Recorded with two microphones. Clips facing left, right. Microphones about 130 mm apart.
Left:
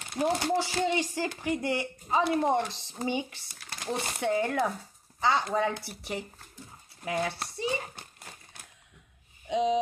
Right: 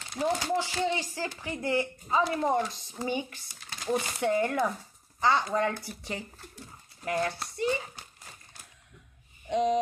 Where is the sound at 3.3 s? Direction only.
70° left (ahead or behind).